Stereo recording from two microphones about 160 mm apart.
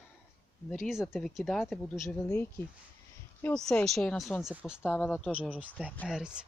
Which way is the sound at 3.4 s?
5° left (ahead or behind).